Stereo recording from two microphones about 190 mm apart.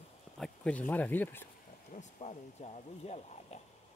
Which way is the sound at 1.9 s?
40° left (ahead or behind).